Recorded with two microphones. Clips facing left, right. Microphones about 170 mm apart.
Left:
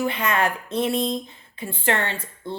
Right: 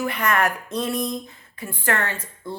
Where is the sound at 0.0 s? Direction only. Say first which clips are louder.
Even; 25° left (ahead or behind).